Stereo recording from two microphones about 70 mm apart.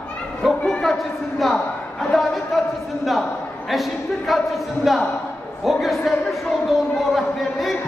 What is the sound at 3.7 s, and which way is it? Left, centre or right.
A man's voice, centre.